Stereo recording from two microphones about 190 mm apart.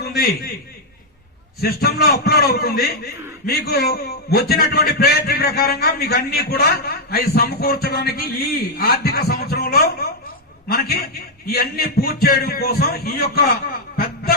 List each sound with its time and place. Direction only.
0.0 s a man's voice: 55° left (ahead or behind)
1.6 s a man's voice: 55° left (ahead or behind)